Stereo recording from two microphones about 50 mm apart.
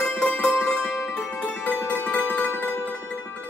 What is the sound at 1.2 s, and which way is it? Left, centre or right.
Music, left.